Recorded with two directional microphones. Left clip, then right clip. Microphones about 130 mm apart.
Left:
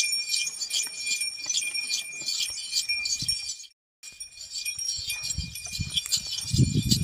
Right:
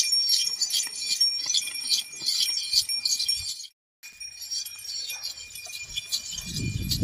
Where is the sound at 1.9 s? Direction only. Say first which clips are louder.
Right 4 dB; 50° left (ahead or behind).